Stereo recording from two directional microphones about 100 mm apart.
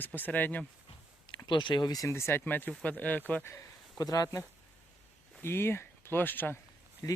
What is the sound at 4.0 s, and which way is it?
Speech, 40° left (ahead or behind).